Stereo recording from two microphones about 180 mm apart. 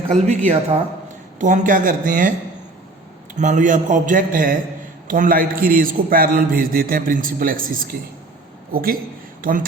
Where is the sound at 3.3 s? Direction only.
45° right (ahead or behind).